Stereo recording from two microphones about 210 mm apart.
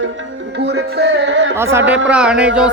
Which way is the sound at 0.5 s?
55° right (ahead or behind).